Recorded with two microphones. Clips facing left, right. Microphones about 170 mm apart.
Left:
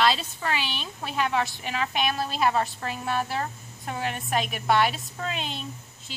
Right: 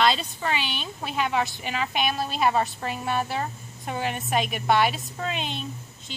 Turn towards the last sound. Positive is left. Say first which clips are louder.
# right 2 dB
turn(degrees=5)  # may be behind; listen again after turning